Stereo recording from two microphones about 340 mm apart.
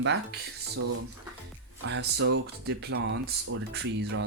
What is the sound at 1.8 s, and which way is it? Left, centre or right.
Speech, right.